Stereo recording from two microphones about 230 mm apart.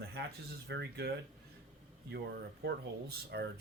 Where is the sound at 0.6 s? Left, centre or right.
Right.